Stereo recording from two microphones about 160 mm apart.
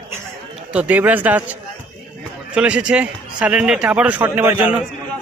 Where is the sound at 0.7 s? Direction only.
10° right (ahead or behind).